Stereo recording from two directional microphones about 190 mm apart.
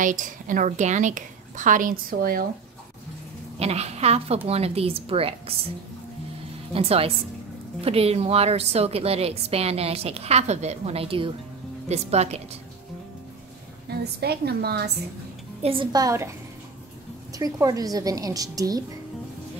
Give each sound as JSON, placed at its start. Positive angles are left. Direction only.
{"t": 0.0, "sound": "a woman's voice", "side_deg": -45}
{"t": 3.5, "sound": "a woman's voice", "side_deg": -35}
{"t": 6.7, "sound": "a woman's voice", "side_deg": -30}
{"t": 13.8, "sound": "a woman's voice", "side_deg": -60}
{"t": 15.6, "sound": "a woman's voice", "side_deg": -25}
{"t": 17.4, "sound": "a woman's voice", "side_deg": -20}